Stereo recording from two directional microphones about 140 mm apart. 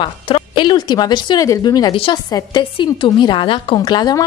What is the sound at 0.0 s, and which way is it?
A woman's voice, 35° left (ahead or behind).